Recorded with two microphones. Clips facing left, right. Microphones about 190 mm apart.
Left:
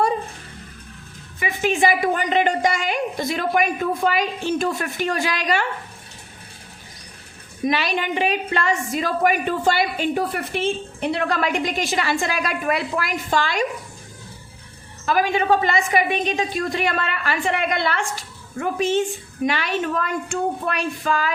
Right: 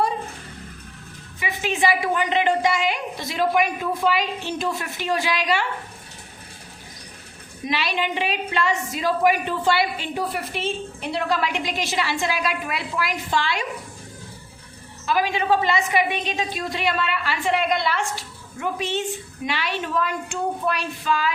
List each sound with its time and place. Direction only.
1.4 s a woman's voice: 50° left (ahead or behind)
7.6 s a woman's voice: 50° left (ahead or behind)
15.0 s a woman's voice: 50° left (ahead or behind)